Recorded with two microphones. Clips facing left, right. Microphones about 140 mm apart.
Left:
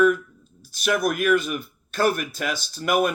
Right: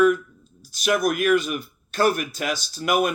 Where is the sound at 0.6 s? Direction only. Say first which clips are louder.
Right 1 dB; 50° left (ahead or behind).